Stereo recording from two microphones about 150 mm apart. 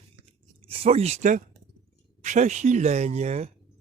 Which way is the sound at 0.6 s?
40° right (ahead or behind).